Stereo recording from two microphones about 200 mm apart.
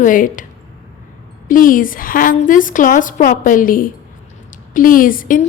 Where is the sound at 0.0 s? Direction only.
40° left (ahead or behind).